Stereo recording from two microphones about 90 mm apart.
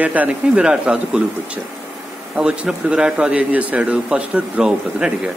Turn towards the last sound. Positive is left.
turn(degrees=-10)  # may be behind; listen again after turning